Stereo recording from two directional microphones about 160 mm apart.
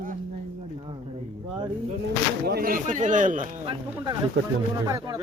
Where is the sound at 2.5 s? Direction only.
70° right (ahead or behind); by 3.4 s 55° right (ahead or behind).